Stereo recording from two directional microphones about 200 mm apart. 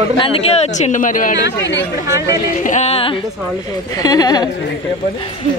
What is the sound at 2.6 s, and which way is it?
Speech, 35° left (ahead or behind).